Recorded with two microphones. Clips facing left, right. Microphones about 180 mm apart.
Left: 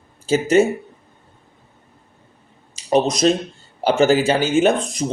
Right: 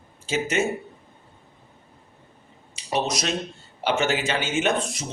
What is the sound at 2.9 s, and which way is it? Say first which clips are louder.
Speech: left 9 dB; 35° left (ahead or behind).